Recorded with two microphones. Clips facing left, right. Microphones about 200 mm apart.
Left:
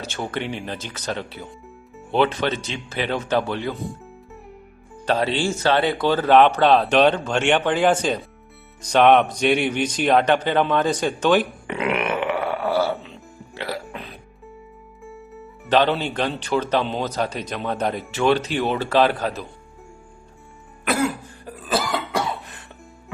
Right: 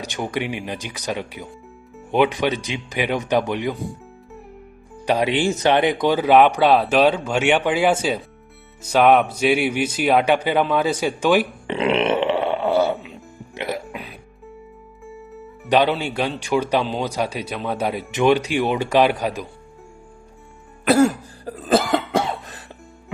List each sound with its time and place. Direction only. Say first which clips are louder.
0.0 s speech: right 2 dB; 15° right (ahead or behind)
5.0 s speech: right 2 dB; 15° right (ahead or behind)
11.7 s burping: right 4 dB; 25° right (ahead or behind)
13.5 s music: right 3 dB; 20° right (ahead or behind)
13.8 s music: right 1 dB; 10° right (ahead or behind)
15.7 s speech: right 1 dB; 10° right (ahead or behind)
20.8 s cough: right 7 dB; 35° right (ahead or behind); by 22.2 s 55° right (ahead or behind)